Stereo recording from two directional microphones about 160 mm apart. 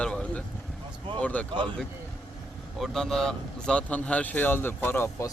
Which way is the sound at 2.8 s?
5° left (ahead or behind).